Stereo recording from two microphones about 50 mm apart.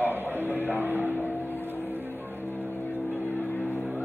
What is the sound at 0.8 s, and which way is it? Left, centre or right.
Speech, right.